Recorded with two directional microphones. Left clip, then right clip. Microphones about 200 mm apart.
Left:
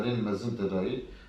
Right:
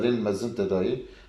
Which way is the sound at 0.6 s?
50° right (ahead or behind).